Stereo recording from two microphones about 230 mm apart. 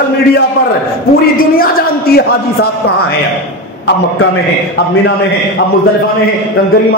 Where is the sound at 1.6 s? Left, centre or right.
Left.